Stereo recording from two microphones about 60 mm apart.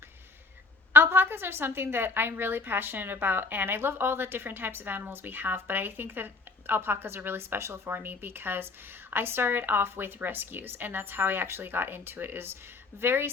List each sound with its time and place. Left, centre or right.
0.9 s a woman's voice: right